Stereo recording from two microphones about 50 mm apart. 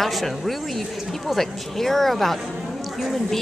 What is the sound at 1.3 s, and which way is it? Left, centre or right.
Speech, centre.